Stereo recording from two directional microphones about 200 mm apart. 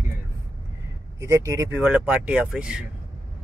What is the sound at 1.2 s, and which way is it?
Speech, 15° right (ahead or behind).